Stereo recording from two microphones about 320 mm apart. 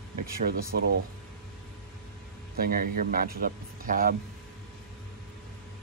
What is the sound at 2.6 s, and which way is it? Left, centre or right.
Speech, right.